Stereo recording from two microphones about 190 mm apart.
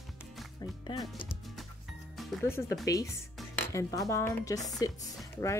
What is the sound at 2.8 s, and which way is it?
Speech, 15° left (ahead or behind).